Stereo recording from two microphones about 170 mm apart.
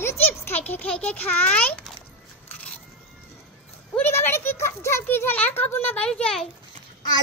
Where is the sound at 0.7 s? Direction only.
5° left (ahead or behind).